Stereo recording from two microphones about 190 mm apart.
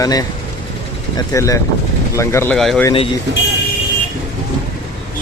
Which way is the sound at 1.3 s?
15° left (ahead or behind).